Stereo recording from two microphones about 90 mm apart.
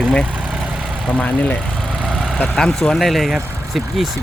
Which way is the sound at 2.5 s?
5° left (ahead or behind).